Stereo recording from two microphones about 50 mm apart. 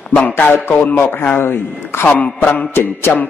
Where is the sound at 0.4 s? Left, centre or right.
Left.